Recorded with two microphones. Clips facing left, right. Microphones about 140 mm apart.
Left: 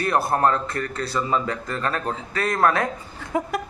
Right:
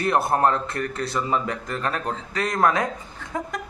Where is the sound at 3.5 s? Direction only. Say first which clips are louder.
Left 5 dB; 10° left (ahead or behind).